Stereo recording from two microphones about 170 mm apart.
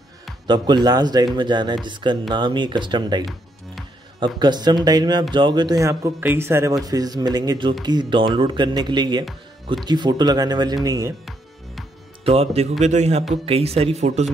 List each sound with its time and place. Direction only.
0.5 s speech: 25° right (ahead or behind)
12.3 s a man's voice: 35° right (ahead or behind)